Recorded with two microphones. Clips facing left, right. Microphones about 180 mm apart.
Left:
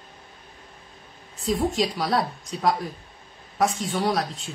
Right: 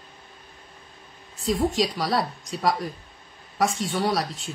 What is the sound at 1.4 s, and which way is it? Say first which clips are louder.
Speech: even; centre (ahead or behind).